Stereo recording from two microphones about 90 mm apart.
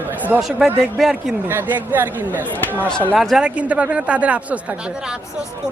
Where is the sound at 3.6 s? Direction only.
15° right (ahead or behind).